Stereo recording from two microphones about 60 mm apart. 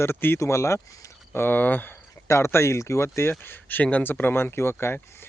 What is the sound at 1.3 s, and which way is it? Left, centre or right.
Speech, left.